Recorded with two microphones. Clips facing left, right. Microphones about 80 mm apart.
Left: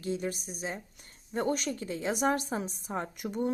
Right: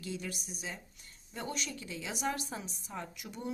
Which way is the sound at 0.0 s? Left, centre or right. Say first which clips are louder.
Left 7 dB; left.